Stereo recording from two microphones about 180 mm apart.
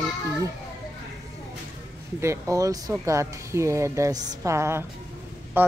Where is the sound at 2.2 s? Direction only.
15° right (ahead or behind).